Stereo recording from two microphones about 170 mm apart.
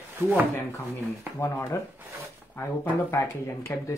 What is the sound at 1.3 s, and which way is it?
Speech, 15° left (ahead or behind).